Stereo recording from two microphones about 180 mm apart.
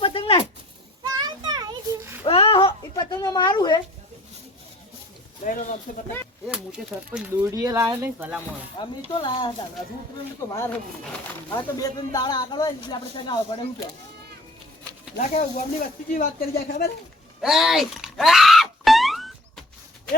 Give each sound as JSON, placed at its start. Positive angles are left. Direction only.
{"t": 0.0, "sound": "a sound", "side_deg": 30}
{"t": 1.0, "sound": "children playing", "side_deg": -20}
{"t": 2.2, "sound": "a sound", "side_deg": 30}
{"t": 5.4, "sound": "speech", "side_deg": 45}
{"t": 6.5, "sound": "speech", "side_deg": -5}
{"t": 7.5, "sound": "speech", "side_deg": -20}
{"t": 8.8, "sound": "a man's voice", "side_deg": 25}
{"t": 10.5, "sound": "a man's voice", "side_deg": 15}
{"t": 15.5, "sound": "speech", "side_deg": 50}
{"t": 17.4, "sound": "music", "side_deg": 0}